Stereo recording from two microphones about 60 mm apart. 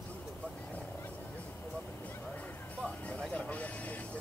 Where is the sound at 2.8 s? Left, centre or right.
Left.